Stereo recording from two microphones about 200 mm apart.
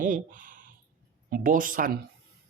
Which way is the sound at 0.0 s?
40° right (ahead or behind).